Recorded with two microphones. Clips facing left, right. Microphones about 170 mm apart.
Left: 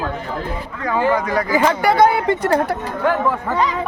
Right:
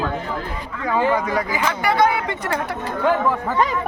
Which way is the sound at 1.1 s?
5° right (ahead or behind).